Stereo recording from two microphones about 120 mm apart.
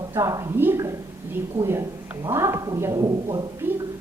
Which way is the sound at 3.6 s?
20° right (ahead or behind).